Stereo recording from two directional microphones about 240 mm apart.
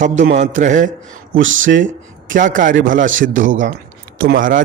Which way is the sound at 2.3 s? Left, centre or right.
Right.